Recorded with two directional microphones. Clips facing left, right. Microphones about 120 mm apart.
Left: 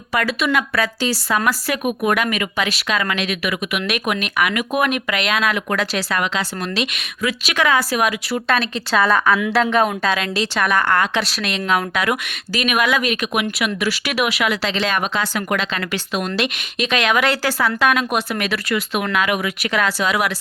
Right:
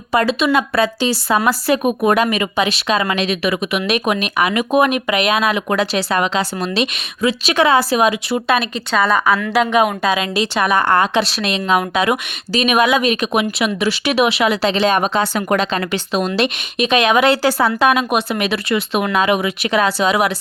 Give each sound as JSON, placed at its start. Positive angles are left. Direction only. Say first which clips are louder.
{"t": 0.1, "sound": "speech", "louder": "right 4 dB", "side_deg": -25}
{"t": 8.9, "sound": "a woman's voice", "louder": "right 1 dB", "side_deg": 0}